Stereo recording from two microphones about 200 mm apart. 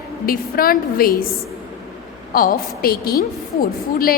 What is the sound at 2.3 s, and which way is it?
A woman's voice, 45° left (ahead or behind).